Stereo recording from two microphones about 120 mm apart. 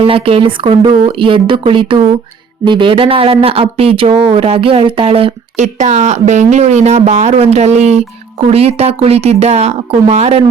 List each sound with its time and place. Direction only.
0.0 s speech: 50° right (ahead or behind)
5.5 s a woman's voice: 75° right (ahead or behind)